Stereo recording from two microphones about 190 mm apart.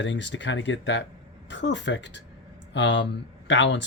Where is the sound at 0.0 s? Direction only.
70° left (ahead or behind).